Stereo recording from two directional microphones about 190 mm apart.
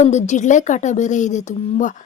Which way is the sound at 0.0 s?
35° left (ahead or behind).